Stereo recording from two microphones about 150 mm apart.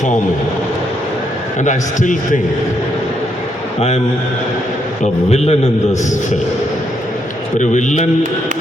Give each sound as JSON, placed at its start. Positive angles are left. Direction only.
{"t": 1.6, "sound": "a man's voice", "side_deg": 55}
{"t": 3.8, "sound": "a man's voice", "side_deg": 45}
{"t": 5.3, "sound": "a man's voice", "side_deg": 45}
{"t": 7.6, "sound": "a man's voice", "side_deg": 55}